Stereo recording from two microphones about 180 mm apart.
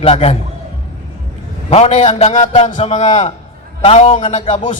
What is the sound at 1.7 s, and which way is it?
A man's voice, 40° left (ahead or behind).